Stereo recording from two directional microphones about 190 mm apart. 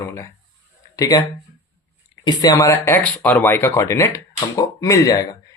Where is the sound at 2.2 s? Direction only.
20° left (ahead or behind).